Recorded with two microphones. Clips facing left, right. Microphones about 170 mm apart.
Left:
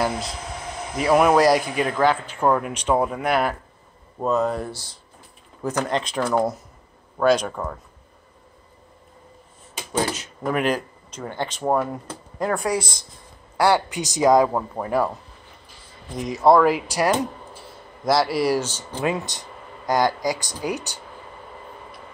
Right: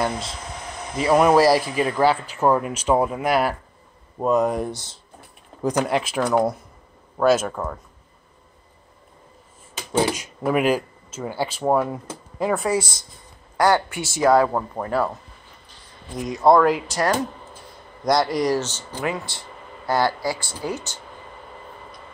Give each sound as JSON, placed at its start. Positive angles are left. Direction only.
{"t": 0.0, "sound": "a man's voice", "side_deg": 0}
{"t": 9.9, "sound": "a man's voice", "side_deg": -10}
{"t": 13.6, "sound": "speech", "side_deg": 10}
{"t": 16.2, "sound": "a man's voice", "side_deg": 0}